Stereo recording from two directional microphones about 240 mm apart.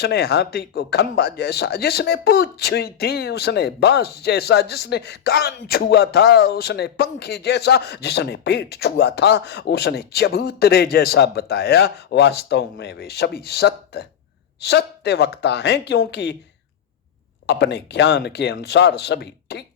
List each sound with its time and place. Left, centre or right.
0.0 s speech: left
17.4 s speech: left